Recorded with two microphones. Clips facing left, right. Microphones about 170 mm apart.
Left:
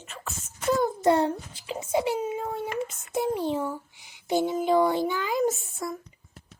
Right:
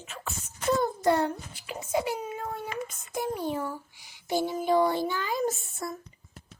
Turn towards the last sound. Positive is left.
turn(degrees=15)  # may be behind; listen again after turning